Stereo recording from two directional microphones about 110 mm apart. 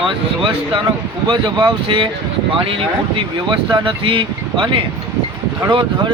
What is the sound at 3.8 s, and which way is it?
Speech, 50° right (ahead or behind).